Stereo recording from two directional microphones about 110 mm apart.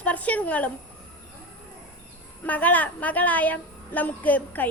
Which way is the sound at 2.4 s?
15° left (ahead or behind).